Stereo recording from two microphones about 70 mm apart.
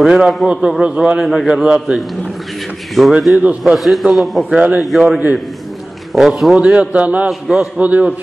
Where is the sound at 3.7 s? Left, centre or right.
Centre.